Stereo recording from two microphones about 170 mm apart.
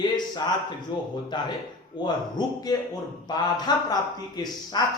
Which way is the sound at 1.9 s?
25° left (ahead or behind).